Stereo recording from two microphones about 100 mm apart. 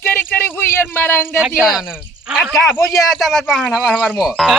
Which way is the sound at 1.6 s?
Centre (ahead or behind).